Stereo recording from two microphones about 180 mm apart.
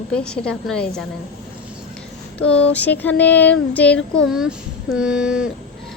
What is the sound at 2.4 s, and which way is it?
Speech, 5° left (ahead or behind).